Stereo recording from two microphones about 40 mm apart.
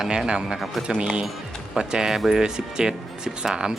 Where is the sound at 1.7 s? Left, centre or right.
Centre.